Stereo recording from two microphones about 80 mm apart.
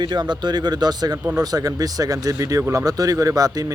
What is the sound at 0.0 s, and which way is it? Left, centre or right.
Speech, right.